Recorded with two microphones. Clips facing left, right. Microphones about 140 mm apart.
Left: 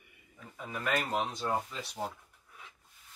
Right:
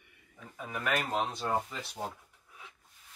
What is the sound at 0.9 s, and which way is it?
Speech, 5° right (ahead or behind).